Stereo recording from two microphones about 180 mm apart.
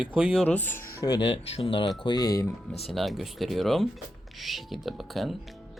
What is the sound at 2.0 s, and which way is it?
Speech, 20° left (ahead or behind).